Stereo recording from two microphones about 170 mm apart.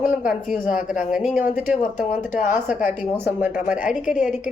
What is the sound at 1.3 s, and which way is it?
Speech, 10° right (ahead or behind).